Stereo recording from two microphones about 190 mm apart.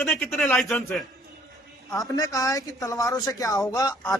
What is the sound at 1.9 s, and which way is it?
A man's voice, 20° left (ahead or behind).